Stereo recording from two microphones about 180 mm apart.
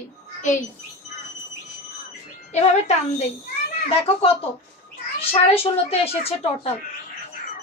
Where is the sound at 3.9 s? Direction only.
35° left (ahead or behind).